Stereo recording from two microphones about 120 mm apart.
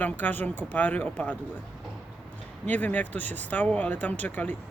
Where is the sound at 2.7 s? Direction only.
15° left (ahead or behind).